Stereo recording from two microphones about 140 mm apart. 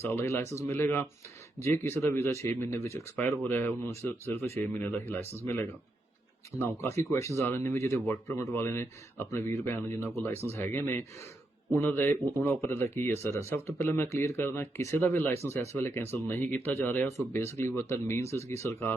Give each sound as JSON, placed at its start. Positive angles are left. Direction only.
{"t": 0.0, "sound": "speech", "side_deg": 15}
{"t": 6.6, "sound": "speech", "side_deg": 20}